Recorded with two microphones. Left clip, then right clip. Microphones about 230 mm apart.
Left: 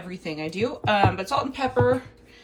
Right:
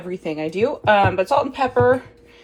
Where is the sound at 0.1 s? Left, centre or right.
Centre.